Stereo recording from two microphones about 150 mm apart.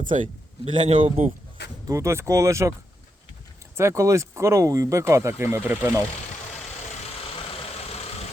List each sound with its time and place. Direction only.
0.0 s a man's voice: 60° right (ahead or behind)
0.6 s a man's voice: 40° right (ahead or behind)
1.9 s speech: 20° right (ahead or behind)
3.8 s speech: 20° right (ahead or behind)
7.4 s vehicle: 45° left (ahead or behind)